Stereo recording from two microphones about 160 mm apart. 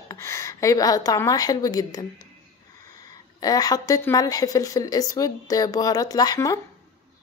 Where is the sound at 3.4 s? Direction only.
25° left (ahead or behind).